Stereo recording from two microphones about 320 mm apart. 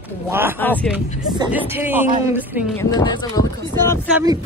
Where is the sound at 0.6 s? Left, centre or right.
Centre.